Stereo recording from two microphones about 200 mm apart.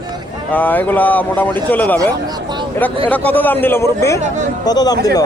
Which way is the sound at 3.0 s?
10° left (ahead or behind).